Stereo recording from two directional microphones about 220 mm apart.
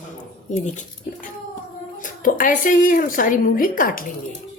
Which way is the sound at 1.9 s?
40° left (ahead or behind).